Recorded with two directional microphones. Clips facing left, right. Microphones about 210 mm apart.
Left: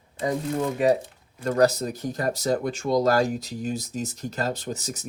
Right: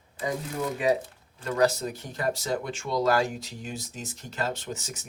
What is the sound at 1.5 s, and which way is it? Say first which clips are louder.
Speech: left 4 dB; 40° left (ahead or behind).